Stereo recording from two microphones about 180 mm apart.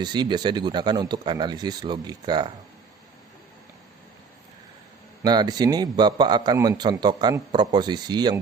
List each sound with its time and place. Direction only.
0.0 s a man's voice: 25° right (ahead or behind)
5.2 s a man's voice: 20° right (ahead or behind)